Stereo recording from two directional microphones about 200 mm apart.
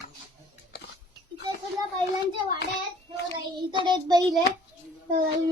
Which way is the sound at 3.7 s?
20° right (ahead or behind).